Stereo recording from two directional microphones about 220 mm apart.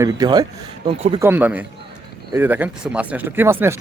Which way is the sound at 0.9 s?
30° right (ahead or behind).